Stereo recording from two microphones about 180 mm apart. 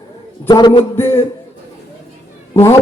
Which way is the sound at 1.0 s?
15° left (ahead or behind).